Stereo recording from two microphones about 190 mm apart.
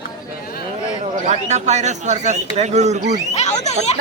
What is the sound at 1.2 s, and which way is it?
Speech, 35° right (ahead or behind).